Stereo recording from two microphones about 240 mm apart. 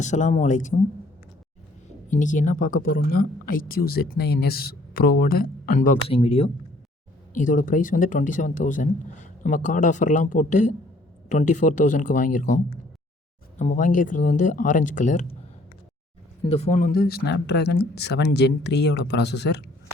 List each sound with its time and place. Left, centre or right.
0.0 s speech: left
2.0 s a man's voice: left
16.4 s speech: left